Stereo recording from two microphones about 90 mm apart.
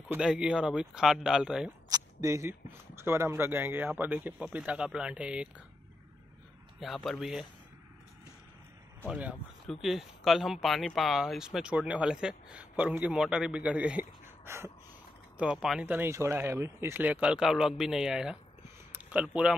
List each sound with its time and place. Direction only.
0.3 s speech: 10° right (ahead or behind)
1.9 s a sound: 35° right (ahead or behind)
3.0 s speech: 25° right (ahead or behind)
6.8 s speech: centre (ahead or behind)
9.8 s speech: centre (ahead or behind)
14.2 s a sound: 25° right (ahead or behind)
15.3 s speech: 10° right (ahead or behind)
15.8 s speech: 20° right (ahead or behind)
17.0 s speech: 15° right (ahead or behind)
18.9 s a sound: 20° right (ahead or behind)
19.2 s speech: 10° right (ahead or behind)